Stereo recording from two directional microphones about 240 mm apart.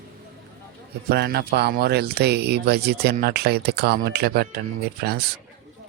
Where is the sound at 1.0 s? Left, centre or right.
Right.